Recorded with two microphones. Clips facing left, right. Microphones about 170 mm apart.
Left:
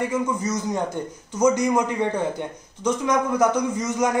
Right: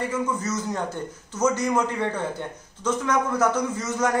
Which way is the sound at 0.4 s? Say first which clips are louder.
Left 3 dB; 15° left (ahead or behind).